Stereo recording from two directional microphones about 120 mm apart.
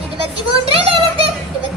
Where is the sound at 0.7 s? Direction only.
50° right (ahead or behind).